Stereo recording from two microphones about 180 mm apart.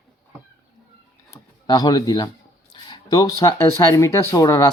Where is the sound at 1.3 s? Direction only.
20° left (ahead or behind).